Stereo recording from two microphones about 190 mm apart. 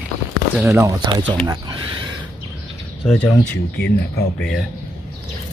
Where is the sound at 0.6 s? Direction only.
10° right (ahead or behind).